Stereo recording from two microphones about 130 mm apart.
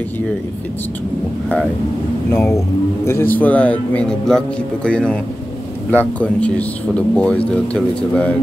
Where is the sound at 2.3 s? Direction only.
20° left (ahead or behind).